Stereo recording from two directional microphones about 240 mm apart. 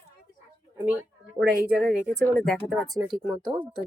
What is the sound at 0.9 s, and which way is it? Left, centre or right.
Speech, centre.